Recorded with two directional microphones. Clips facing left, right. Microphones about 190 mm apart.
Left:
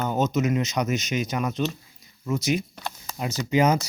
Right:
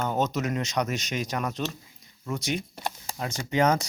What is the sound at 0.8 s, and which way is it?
Speech, 35° right (ahead or behind).